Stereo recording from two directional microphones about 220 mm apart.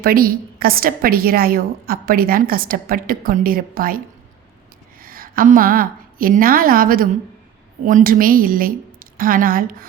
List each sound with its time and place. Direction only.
0.0 s a woman's voice: 40° right (ahead or behind)
5.0 s a woman's voice: 40° right (ahead or behind)